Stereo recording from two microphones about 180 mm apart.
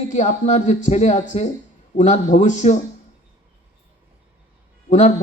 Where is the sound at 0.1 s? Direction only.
40° left (ahead or behind).